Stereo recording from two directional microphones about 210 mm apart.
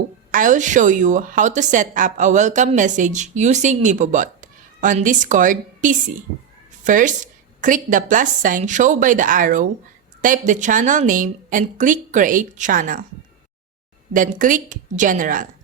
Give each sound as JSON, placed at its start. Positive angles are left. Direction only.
{"t": 0.3, "sound": "a woman's voice", "side_deg": -40}
{"t": 14.1, "sound": "a woman's voice", "side_deg": -40}